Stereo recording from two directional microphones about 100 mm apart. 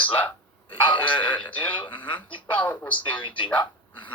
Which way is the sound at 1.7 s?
55° left (ahead or behind).